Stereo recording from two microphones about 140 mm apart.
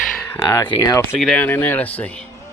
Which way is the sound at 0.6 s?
30° left (ahead or behind).